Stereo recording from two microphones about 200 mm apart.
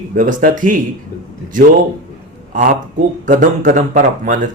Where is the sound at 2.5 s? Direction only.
40° right (ahead or behind).